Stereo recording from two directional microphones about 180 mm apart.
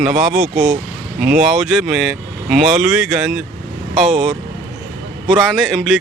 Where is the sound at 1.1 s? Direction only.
55° right (ahead or behind).